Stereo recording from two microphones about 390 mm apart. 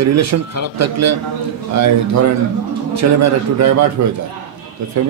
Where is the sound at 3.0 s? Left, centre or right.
Right.